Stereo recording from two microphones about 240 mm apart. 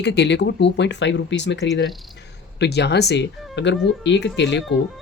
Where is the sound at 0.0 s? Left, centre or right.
Left.